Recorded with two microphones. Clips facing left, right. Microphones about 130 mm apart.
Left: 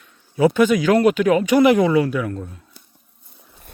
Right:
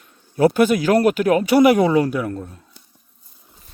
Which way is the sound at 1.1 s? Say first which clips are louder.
Even; 40° right (ahead or behind).